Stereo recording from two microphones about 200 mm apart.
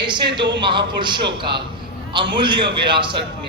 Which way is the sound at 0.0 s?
25° right (ahead or behind).